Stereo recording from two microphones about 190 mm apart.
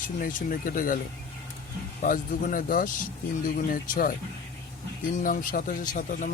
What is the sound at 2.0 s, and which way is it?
Speech, 45° left (ahead or behind).